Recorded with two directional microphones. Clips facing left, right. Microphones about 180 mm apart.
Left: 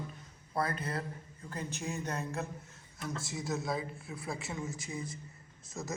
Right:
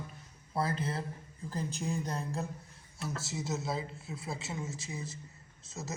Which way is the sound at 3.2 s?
25° right (ahead or behind).